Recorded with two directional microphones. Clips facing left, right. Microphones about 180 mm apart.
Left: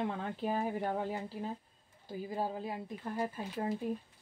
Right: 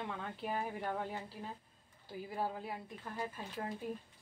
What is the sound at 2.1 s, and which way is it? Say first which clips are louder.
Speech: left 3 dB; 20° left (ahead or behind).